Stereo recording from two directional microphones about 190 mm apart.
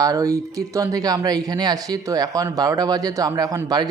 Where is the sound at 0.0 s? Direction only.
20° right (ahead or behind).